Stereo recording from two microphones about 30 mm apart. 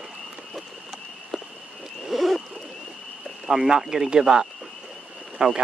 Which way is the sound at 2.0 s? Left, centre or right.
Centre.